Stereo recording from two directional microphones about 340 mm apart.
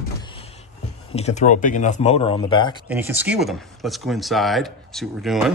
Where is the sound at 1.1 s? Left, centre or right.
Centre.